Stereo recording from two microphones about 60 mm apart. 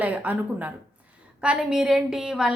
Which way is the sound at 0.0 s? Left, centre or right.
Right.